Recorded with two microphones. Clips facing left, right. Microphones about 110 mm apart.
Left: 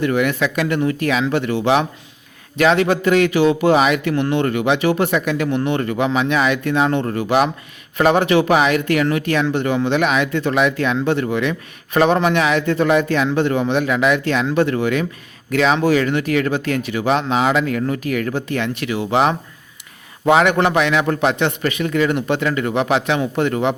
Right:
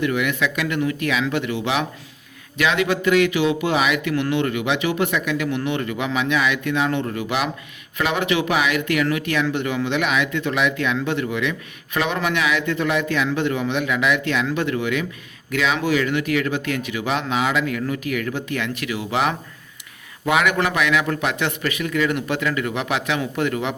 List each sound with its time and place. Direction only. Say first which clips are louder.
0.0 s speech: left 4 dB; 35° left (ahead or behind)